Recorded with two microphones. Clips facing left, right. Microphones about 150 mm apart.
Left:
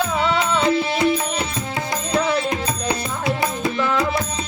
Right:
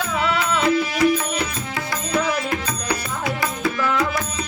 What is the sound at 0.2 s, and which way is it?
Music, 25° left (ahead or behind).